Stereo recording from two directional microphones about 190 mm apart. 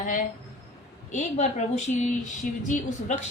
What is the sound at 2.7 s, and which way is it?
Speech, 40° left (ahead or behind).